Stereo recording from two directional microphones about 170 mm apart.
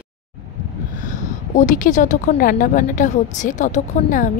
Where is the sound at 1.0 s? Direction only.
50° left (ahead or behind).